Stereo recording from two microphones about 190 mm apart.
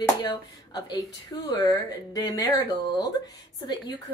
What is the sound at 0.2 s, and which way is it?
Speech, 20° left (ahead or behind).